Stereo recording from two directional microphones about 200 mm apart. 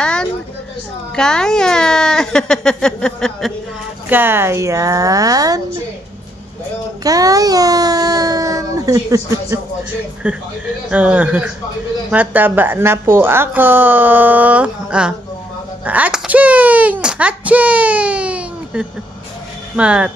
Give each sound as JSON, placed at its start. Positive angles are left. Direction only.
{"t": 0.0, "sound": "a sound", "side_deg": 5}
{"t": 1.1, "sound": "speech", "side_deg": 5}
{"t": 4.1, "sound": "a woman's voice", "side_deg": -10}
{"t": 7.0, "sound": "a child's voice", "side_deg": -20}